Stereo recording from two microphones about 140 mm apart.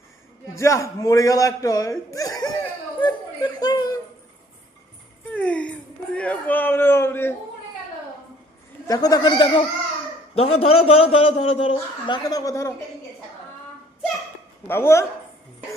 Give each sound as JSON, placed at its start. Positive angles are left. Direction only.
{"t": 0.5, "sound": "a man's voice", "side_deg": 20}
{"t": 3.0, "sound": "laughter", "side_deg": 30}
{"t": 5.3, "sound": "speech", "side_deg": 10}
{"t": 8.9, "sound": "a man's voice", "side_deg": 25}
{"t": 10.3, "sound": "a man's voice", "side_deg": 45}
{"t": 14.7, "sound": "speech", "side_deg": 20}